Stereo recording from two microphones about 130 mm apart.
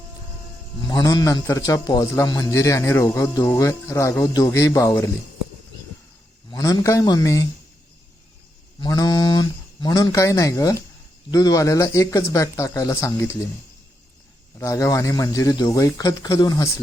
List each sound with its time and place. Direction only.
0.9 s a man's voice: 30° left (ahead or behind)
6.5 s a man's voice: 25° left (ahead or behind)
8.8 s a man's voice: 30° left (ahead or behind)
14.6 s a man's voice: 25° left (ahead or behind)